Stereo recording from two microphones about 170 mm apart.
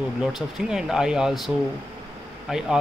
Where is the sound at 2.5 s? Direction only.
5° right (ahead or behind).